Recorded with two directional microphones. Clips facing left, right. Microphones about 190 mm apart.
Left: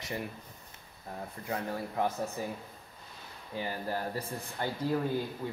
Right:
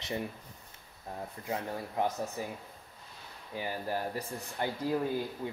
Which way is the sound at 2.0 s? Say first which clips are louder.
Even; 15° right (ahead or behind).